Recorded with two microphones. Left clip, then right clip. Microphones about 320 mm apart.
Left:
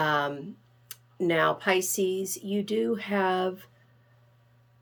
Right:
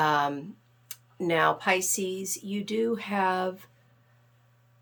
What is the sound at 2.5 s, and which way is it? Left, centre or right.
Speech, right.